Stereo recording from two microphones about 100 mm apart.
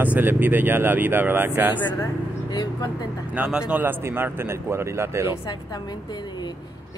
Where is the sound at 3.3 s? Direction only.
10° right (ahead or behind).